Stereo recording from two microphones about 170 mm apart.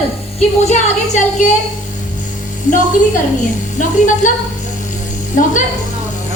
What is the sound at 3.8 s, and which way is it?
Speech, 50° left (ahead or behind).